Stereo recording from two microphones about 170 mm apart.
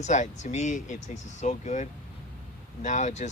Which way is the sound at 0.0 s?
45° left (ahead or behind).